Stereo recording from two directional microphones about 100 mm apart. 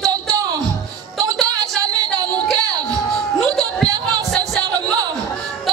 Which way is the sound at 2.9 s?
5° left (ahead or behind).